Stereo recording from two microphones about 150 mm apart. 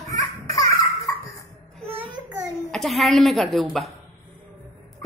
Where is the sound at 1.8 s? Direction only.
35° right (ahead or behind).